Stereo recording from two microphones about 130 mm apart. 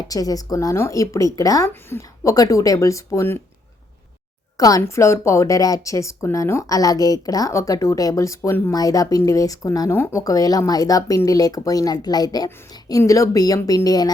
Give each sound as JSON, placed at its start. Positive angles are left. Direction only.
{"t": 0.1, "sound": "speech", "side_deg": 30}
{"t": 4.5, "sound": "speech", "side_deg": 25}
{"t": 8.7, "sound": "speech", "side_deg": 30}